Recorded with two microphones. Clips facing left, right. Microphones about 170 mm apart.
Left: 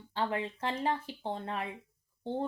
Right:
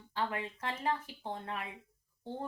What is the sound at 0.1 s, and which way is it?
Speech, 30° left (ahead or behind).